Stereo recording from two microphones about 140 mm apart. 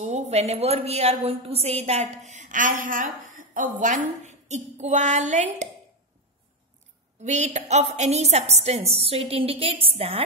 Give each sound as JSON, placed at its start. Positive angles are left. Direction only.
{"t": 0.0, "sound": "a woman's voice", "side_deg": -55}
{"t": 2.3, "sound": "a sound", "side_deg": -65}
{"t": 3.3, "sound": "a woman's voice", "side_deg": -70}
{"t": 7.2, "sound": "a woman's voice", "side_deg": -55}